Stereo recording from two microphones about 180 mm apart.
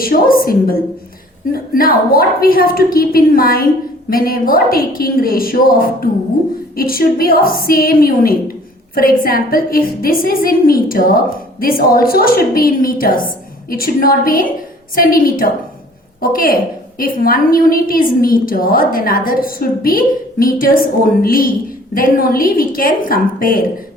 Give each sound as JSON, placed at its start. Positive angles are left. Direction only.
{"t": 0.0, "sound": "a woman's voice", "side_deg": 55}